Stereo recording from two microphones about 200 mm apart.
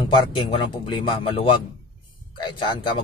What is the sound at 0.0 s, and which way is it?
Speech, 25° left (ahead or behind).